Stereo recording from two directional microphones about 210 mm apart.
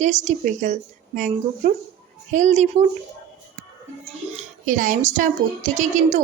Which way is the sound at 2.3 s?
35° right (ahead or behind).